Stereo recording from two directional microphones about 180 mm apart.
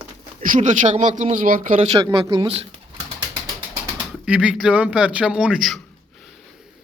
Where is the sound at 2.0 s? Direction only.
20° right (ahead or behind).